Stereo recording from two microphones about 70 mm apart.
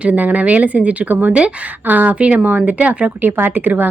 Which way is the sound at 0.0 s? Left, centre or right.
Right.